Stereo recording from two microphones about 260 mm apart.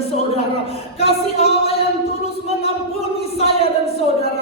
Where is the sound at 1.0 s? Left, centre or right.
Left.